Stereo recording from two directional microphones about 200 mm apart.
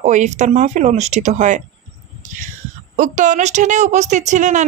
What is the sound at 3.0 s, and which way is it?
A woman's voice, 40° right (ahead or behind).